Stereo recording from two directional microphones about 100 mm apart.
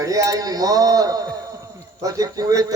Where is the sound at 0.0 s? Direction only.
35° right (ahead or behind).